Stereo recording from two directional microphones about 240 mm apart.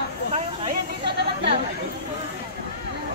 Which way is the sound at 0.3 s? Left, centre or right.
Right.